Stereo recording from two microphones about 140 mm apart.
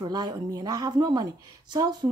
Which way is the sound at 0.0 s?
30° right (ahead or behind).